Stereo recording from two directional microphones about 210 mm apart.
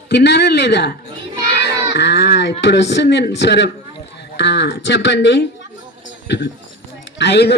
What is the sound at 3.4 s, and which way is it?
A man's voice, 55° left (ahead or behind).